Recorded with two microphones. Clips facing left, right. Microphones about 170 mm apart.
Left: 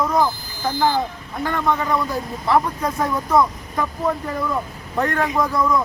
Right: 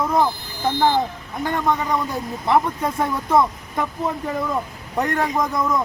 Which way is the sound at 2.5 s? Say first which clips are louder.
Even; 25° right (ahead or behind).